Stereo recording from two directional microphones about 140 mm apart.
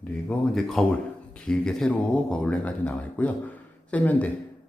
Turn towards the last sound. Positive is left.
turn(degrees=10)  # may be behind; listen again after turning